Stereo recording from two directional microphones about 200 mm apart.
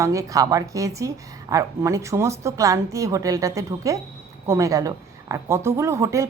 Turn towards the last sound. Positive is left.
turn(degrees=-15)  # may be behind; listen again after turning